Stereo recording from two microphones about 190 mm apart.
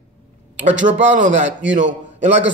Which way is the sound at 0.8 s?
70° right (ahead or behind).